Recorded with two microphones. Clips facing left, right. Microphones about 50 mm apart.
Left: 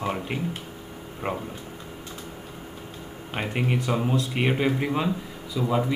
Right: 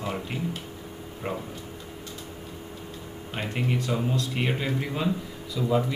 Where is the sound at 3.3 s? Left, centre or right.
Left.